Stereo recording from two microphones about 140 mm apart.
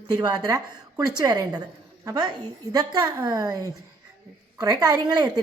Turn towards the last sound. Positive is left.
turn(degrees=-30)  # may be behind; listen again after turning